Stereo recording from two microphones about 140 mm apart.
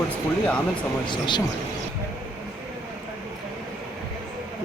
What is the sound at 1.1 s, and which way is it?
Speech, 35° left (ahead or behind).